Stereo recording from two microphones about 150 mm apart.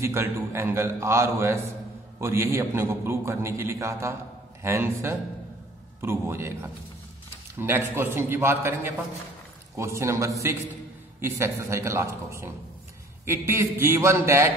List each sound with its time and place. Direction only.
0.0 s a man's voice: 15° right (ahead or behind)